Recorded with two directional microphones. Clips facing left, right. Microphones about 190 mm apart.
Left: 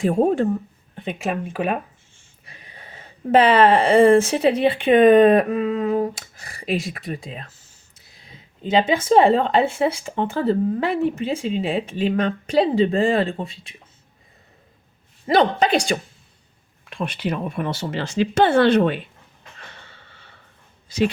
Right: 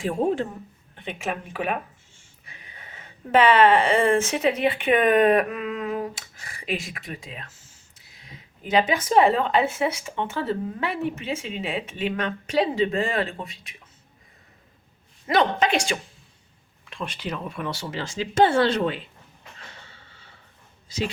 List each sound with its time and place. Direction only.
1.3 s speech: centre (ahead or behind)
2.5 s speech: 35° left (ahead or behind)
15.3 s speech: 35° left (ahead or behind)
16.9 s speech: 60° left (ahead or behind)
20.8 s a sound: 60° left (ahead or behind)